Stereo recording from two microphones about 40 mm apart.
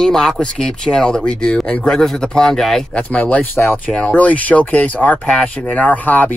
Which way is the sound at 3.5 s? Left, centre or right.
Left.